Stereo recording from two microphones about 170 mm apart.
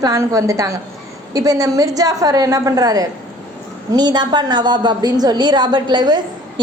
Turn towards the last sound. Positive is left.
turn(degrees=-25)  # may be behind; listen again after turning